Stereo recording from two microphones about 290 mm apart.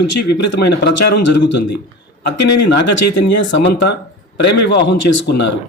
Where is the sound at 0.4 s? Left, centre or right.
Left.